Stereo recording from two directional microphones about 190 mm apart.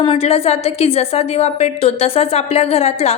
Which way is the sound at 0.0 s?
30° left (ahead or behind).